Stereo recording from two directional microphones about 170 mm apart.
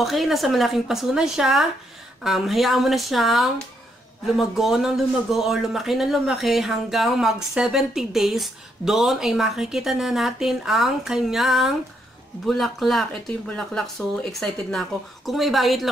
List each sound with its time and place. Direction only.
0.0 s speech: centre (ahead or behind)